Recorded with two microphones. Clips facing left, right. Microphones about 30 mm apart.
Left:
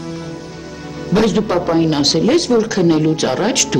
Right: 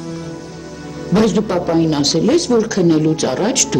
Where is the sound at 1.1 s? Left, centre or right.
Centre.